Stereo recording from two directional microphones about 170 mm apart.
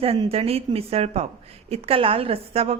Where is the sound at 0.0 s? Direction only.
35° right (ahead or behind).